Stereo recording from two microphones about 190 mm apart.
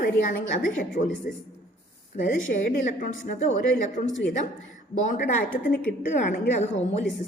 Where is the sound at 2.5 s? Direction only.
45° left (ahead or behind).